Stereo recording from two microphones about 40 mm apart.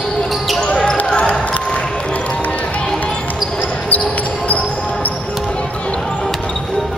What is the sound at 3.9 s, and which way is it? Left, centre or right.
Basketball bounce, left.